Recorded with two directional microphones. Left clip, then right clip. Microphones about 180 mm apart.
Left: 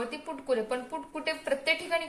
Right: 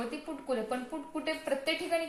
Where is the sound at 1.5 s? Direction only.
50° left (ahead or behind).